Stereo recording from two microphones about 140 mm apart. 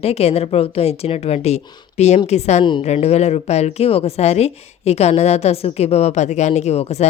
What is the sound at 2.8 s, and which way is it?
Speech, 50° left (ahead or behind).